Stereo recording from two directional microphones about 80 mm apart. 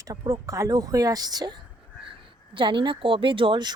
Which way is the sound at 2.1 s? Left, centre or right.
Right.